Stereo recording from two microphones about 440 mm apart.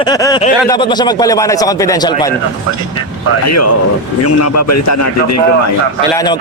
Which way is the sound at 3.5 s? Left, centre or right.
Left.